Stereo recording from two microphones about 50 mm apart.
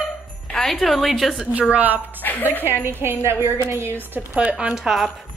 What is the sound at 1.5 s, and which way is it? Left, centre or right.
Speech, right.